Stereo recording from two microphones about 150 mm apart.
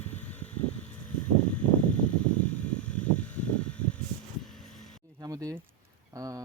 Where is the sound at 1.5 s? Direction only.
10° left (ahead or behind).